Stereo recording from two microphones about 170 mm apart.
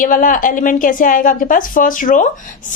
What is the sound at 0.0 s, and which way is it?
A woman's voice, 55° left (ahead or behind).